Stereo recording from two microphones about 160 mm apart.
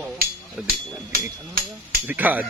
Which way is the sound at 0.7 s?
65° right (ahead or behind).